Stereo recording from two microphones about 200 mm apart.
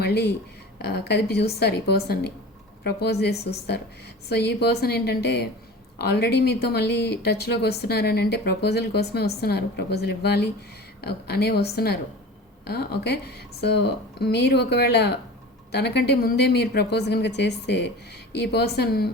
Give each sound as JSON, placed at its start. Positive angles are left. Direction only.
{"t": 0.0, "sound": "a woman's voice", "side_deg": 55}